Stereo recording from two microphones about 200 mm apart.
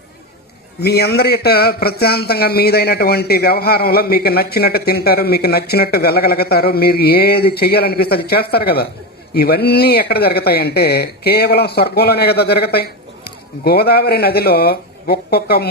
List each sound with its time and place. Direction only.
0.8 s a man's voice: 55° left (ahead or behind)